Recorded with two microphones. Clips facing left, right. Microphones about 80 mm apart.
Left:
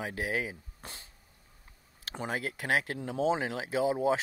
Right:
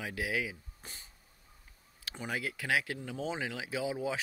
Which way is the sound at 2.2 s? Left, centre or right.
Left.